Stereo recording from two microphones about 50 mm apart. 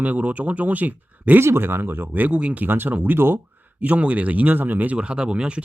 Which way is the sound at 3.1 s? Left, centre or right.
Right.